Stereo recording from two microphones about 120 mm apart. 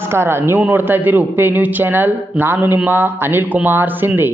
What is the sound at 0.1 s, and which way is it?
A man's voice, 20° right (ahead or behind).